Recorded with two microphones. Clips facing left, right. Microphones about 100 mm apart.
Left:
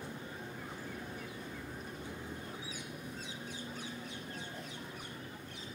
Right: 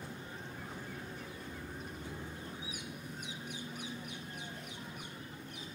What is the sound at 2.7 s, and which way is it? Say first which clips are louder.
Duck: left 1 dB; 15° right (ahead or behind).